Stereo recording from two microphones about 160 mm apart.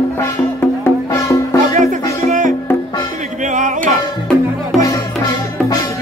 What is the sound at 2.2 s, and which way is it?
Music, 50° right (ahead or behind).